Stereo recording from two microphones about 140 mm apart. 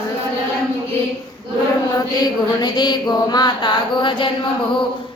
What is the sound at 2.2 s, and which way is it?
Mantra, 30° left (ahead or behind).